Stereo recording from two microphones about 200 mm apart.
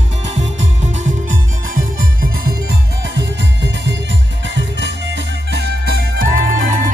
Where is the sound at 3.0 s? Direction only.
60° right (ahead or behind).